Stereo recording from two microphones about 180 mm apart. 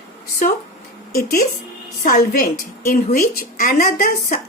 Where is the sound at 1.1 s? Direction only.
60° left (ahead or behind).